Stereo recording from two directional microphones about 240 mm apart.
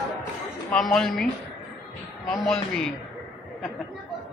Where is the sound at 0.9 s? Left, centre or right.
Centre.